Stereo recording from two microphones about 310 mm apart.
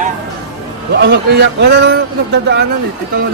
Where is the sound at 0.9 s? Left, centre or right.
Right.